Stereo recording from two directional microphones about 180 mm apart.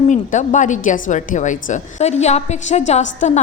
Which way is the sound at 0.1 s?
45° left (ahead or behind).